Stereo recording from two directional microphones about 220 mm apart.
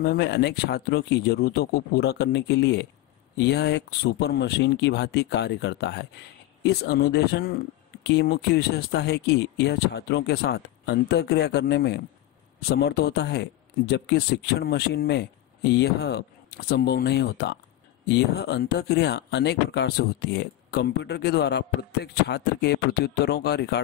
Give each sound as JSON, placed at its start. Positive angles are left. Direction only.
{"t": 0.0, "sound": "speech", "side_deg": 50}